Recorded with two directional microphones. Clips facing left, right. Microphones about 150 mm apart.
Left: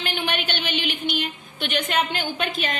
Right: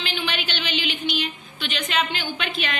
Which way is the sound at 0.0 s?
55° left (ahead or behind).